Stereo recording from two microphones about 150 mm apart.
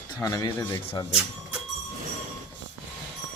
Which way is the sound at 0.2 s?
25° left (ahead or behind).